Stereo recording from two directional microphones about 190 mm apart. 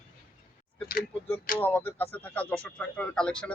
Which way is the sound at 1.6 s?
10° left (ahead or behind).